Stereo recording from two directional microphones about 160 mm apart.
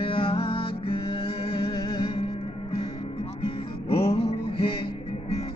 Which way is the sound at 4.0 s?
35° left (ahead or behind).